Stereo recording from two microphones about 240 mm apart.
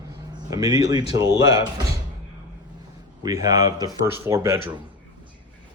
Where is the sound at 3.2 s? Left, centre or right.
Centre.